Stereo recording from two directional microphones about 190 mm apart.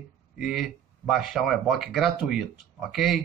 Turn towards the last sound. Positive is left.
turn(degrees=0)  # may be behind; listen again after turning